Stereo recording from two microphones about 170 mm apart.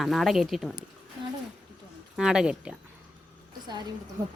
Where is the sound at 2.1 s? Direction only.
5° right (ahead or behind).